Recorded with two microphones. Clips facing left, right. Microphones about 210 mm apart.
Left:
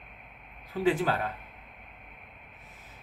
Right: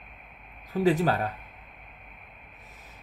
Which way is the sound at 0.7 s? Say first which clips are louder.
Right 3 dB; 40° right (ahead or behind).